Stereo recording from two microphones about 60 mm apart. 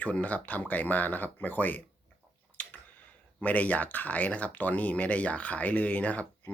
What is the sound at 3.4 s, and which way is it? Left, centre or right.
Speech, left.